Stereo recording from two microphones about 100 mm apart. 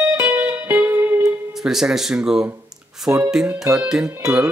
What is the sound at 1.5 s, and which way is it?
Speech, 5° right (ahead or behind).